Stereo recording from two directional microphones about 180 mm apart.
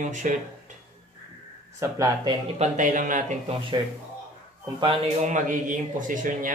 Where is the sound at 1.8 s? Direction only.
20° right (ahead or behind).